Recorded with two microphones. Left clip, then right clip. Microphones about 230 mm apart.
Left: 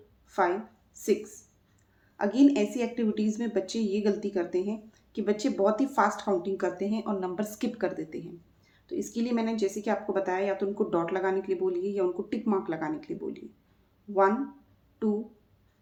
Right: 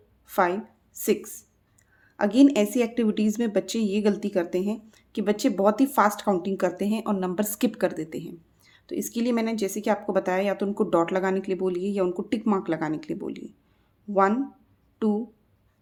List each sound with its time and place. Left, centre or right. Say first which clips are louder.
0.3 s a woman's voice: right 3 dB; right